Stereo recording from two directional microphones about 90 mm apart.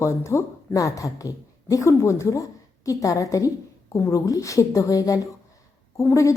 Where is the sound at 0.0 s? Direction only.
30° left (ahead or behind).